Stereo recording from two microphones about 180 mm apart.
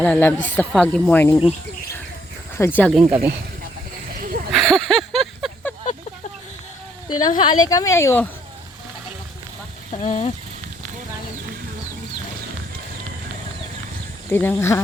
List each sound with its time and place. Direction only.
0.0 s speech: 10° left (ahead or behind)
2.6 s speech: 10° left (ahead or behind)
2.9 s speech: 5° right (ahead or behind)
4.2 s a sound: 55° right (ahead or behind)
4.5 s a sound: centre (ahead or behind)
7.2 s a woman's voice: 25° left (ahead or behind)
9.9 s speech: 40° left (ahead or behind)
14.3 s speech: 10° left (ahead or behind)